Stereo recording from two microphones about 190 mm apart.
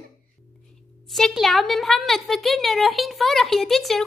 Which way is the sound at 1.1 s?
Centre (ahead or behind).